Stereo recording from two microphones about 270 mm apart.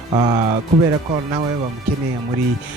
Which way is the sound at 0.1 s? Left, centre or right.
Centre.